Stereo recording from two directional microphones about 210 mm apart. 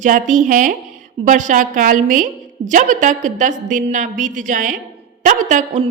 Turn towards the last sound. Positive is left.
turn(degrees=-35)  # may be behind; listen again after turning